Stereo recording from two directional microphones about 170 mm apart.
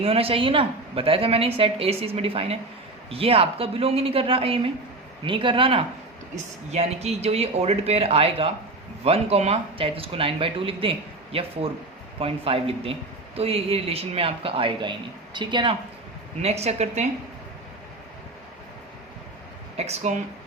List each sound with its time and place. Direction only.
0.0 s speech: 35° right (ahead or behind)
16.4 s speech: 40° right (ahead or behind)
19.7 s speech: 40° right (ahead or behind)